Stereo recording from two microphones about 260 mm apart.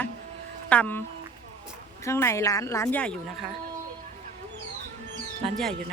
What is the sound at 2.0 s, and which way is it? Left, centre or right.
A woman's voice, centre.